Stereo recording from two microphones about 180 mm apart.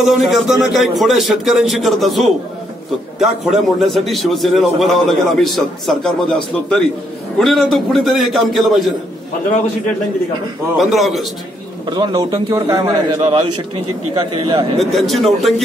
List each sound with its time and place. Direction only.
0.0 s a man's voice: centre (ahead or behind)
7.3 s a man's voice: centre (ahead or behind)
10.8 s a man's voice: centre (ahead or behind)
11.8 s a man's voice: 25° right (ahead or behind)
14.8 s a man's voice: centre (ahead or behind)